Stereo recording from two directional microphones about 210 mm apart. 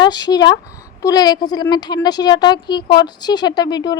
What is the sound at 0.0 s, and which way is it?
Speech, 20° left (ahead or behind).